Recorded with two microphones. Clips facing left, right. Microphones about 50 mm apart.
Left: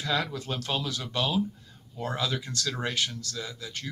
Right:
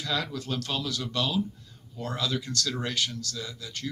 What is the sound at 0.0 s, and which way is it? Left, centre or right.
Speech, left.